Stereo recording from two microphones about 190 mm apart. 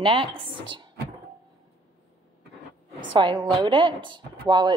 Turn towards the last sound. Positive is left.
turn(degrees=-25)  # may be behind; listen again after turning